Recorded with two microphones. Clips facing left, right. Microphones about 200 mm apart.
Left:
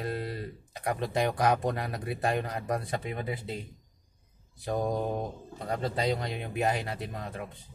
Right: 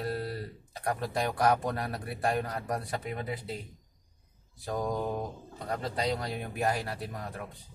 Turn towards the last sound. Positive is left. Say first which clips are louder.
# left 2 dB
turn(degrees=20)  # may be behind; listen again after turning